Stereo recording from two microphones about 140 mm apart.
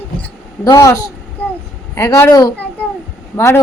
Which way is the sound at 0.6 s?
20° left (ahead or behind).